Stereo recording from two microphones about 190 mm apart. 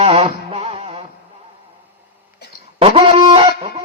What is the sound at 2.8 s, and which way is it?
Chicken, 30° right (ahead or behind).